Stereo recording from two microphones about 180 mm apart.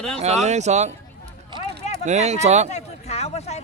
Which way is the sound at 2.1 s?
40° right (ahead or behind).